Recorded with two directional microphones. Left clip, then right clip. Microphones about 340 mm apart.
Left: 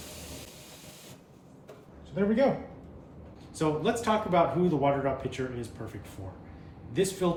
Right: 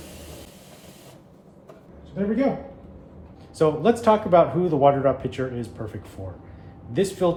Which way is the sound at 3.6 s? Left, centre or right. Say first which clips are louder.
Right 9 dB; centre.